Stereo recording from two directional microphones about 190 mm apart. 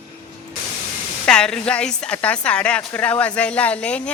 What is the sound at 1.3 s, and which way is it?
A woman's voice, 5° left (ahead or behind).